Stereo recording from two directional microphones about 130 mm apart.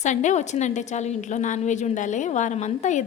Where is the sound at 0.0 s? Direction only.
70° left (ahead or behind).